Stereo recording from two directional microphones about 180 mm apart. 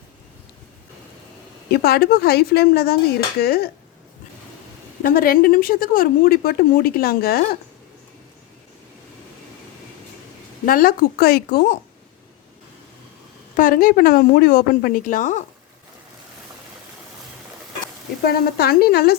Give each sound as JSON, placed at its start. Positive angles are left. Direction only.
{"t": 1.7, "sound": "speech", "side_deg": 60}
{"t": 5.0, "sound": "speech", "side_deg": 55}
{"t": 10.7, "sound": "speech", "side_deg": 55}
{"t": 13.6, "sound": "a woman's voice", "side_deg": 50}
{"t": 18.3, "sound": "speech", "side_deg": 60}